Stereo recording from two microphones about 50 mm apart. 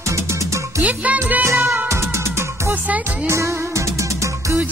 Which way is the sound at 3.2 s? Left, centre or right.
Right.